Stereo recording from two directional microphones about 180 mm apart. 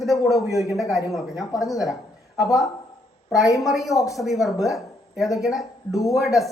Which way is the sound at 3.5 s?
Centre (ahead or behind).